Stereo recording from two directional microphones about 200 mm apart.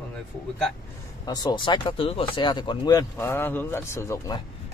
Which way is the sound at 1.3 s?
20° left (ahead or behind).